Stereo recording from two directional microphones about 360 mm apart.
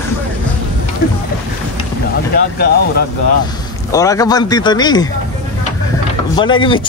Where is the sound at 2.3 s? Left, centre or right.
Left.